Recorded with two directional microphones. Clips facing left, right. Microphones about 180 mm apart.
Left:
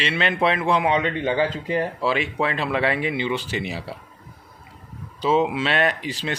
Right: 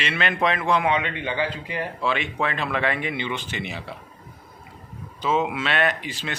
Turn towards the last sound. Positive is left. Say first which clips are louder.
# left 2 dB
turn(degrees=35)  # may be behind; listen again after turning